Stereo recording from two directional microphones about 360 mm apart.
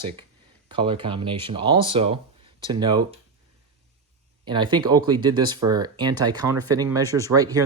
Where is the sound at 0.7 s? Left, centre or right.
Centre.